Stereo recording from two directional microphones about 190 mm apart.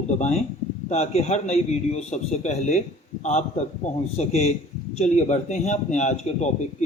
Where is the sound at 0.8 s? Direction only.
35° left (ahead or behind).